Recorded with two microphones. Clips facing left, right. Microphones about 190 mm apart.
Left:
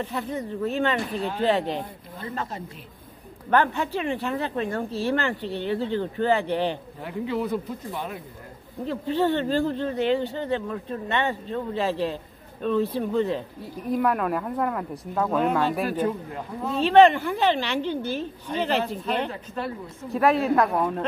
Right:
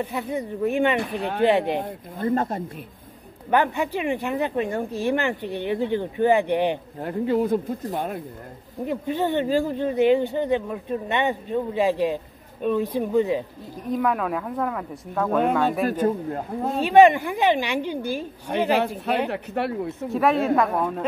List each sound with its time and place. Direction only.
0.0 s speech: 10° right (ahead or behind)
1.1 s speech: 60° right (ahead or behind)
1.8 s speech: 50° right (ahead or behind)
3.4 s speech: 10° right (ahead or behind)
7.0 s speech: 45° right (ahead or behind)
8.8 s speech: 15° right (ahead or behind)
13.8 s speech: 5° left (ahead or behind)
15.9 s speech: 45° right (ahead or behind)
16.7 s speech: 10° right (ahead or behind)
18.5 s speech: 55° right (ahead or behind)
19.2 s speech: 70° right (ahead or behind)
20.1 s speech: centre (ahead or behind)